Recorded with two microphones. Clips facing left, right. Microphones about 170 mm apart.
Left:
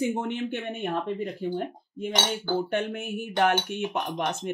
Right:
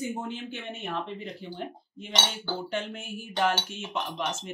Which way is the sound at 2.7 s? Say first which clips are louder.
Left 5 dB; 55° left (ahead or behind).